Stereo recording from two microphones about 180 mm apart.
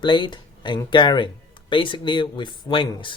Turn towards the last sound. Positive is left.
turn(degrees=30)  # may be behind; listen again after turning